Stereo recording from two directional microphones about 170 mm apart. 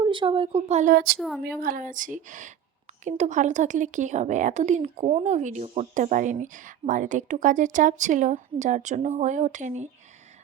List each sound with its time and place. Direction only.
0.0 s speech: 30° right (ahead or behind)
0.9 s a woman's voice: 65° right (ahead or behind); by 9.9 s 45° right (ahead or behind)